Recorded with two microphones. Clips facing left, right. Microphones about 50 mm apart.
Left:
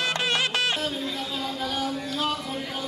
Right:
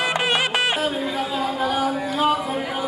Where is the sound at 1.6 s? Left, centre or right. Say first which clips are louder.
Right 6 dB; right.